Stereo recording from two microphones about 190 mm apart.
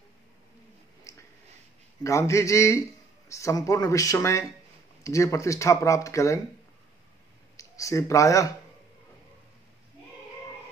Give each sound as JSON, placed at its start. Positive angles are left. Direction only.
{"t": 1.1, "sound": "a sound", "side_deg": 15}
{"t": 2.0, "sound": "speech", "side_deg": 15}
{"t": 7.5, "sound": "speech", "side_deg": 15}